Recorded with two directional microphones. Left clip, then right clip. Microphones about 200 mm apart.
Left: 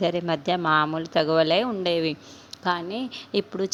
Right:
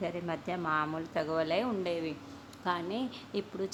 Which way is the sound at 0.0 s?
35° left (ahead or behind).